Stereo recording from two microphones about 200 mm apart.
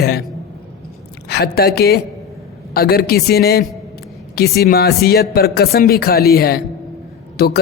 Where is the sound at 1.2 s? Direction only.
55° left (ahead or behind).